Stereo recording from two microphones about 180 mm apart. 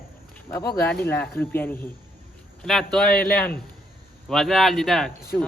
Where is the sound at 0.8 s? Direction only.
10° left (ahead or behind).